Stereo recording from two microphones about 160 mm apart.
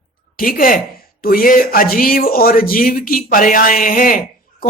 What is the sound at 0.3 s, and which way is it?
Speech, 60° left (ahead or behind).